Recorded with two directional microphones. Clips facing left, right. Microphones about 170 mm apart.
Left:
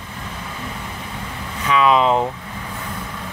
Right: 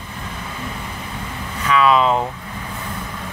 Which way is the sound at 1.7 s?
20° left (ahead or behind).